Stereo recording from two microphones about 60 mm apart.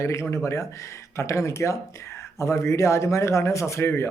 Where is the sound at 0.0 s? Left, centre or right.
Left.